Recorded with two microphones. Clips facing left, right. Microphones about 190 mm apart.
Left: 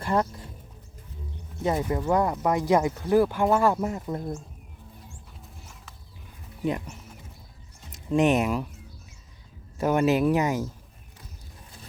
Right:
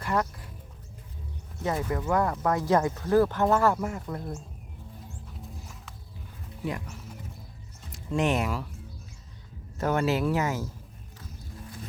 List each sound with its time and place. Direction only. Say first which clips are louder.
0.0 s speech: left 3 dB; 30° left (ahead or behind)
1.6 s speech: left 3 dB; 20° left (ahead or behind)
6.7 s speech: left 5 dB; 20° left (ahead or behind)
9.7 s speech: left 4 dB; 15° left (ahead or behind)